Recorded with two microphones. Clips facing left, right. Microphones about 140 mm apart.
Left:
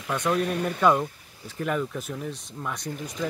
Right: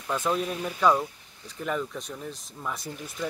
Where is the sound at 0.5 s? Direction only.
60° left (ahead or behind).